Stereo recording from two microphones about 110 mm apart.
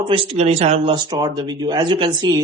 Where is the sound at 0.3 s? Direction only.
75° right (ahead or behind).